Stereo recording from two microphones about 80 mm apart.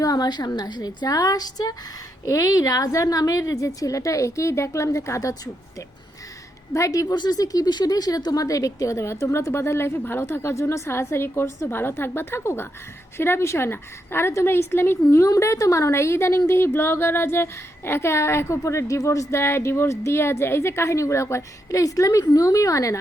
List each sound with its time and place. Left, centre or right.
0.0 s a woman's voice: left
6.7 s a woman's voice: left